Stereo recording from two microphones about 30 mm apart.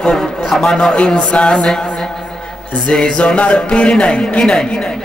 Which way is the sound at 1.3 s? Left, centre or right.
Left.